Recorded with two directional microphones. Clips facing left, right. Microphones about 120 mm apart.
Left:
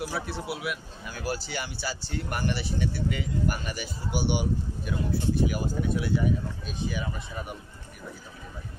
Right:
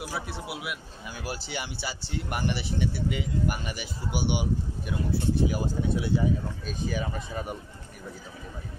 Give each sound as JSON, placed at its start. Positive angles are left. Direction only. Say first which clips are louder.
{"t": 0.1, "sound": "speech", "louder": "left 2 dB", "side_deg": -10}
{"t": 6.6, "sound": "speech", "louder": "right 1 dB", "side_deg": -40}